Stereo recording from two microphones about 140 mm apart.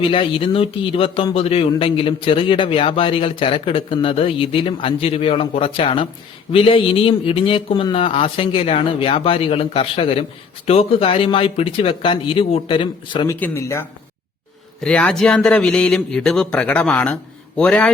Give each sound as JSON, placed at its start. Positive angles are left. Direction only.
{"t": 0.0, "sound": "a man's voice", "side_deg": 40}
{"t": 13.2, "sound": "speech", "side_deg": 20}
{"t": 14.8, "sound": "a man's voice", "side_deg": 5}